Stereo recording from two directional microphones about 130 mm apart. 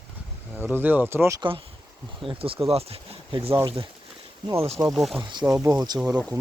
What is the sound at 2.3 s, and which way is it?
Speech, 45° right (ahead or behind).